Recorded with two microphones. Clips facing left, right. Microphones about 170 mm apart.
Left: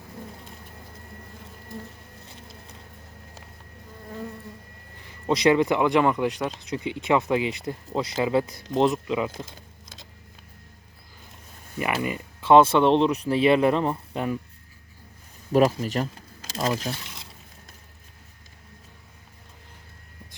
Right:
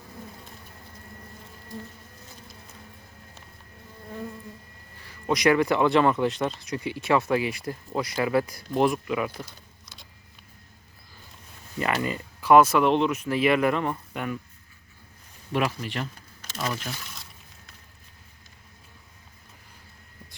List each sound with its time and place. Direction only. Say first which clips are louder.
4.9 s speech: left 2 dB; 25° left (ahead or behind)
11.8 s speech: even; 10° left (ahead or behind); by 14.3 s 30° left (ahead or behind)
15.5 s speech: left 7 dB; 40° left (ahead or behind)